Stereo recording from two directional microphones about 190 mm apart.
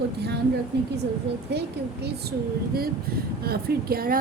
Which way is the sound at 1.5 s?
60° right (ahead or behind).